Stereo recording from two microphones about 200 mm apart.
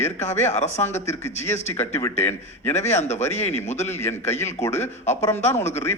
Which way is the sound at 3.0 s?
35° left (ahead or behind).